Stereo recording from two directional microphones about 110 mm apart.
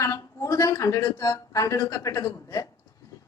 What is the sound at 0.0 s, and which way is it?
A woman's voice, 30° left (ahead or behind).